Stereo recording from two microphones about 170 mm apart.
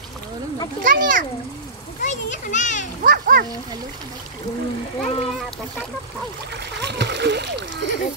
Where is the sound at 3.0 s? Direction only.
60° right (ahead or behind).